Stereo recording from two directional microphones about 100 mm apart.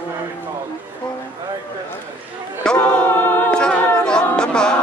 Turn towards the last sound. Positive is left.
turn(degrees=10)  # may be behind; listen again after turning